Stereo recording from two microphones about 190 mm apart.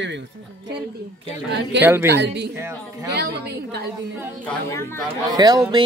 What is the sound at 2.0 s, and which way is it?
Speech, 65° right (ahead or behind).